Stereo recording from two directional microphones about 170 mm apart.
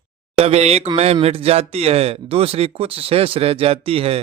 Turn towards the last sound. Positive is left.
turn(degrees=-35)  # may be behind; listen again after turning